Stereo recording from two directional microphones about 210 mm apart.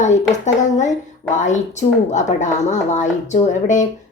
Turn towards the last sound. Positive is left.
turn(degrees=35)  # may be behind; listen again after turning